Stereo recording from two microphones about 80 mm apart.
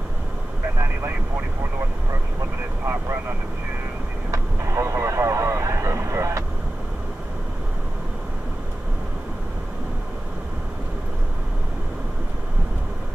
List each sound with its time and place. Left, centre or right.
4.3 s vehicle: right